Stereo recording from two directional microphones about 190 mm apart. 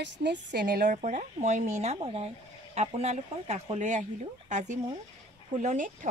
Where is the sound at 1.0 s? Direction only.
40° right (ahead or behind).